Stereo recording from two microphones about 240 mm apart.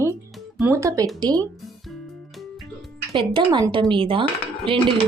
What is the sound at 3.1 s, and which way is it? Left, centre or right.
Speech, centre.